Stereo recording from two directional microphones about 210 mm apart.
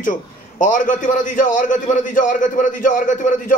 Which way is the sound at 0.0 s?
40° left (ahead or behind).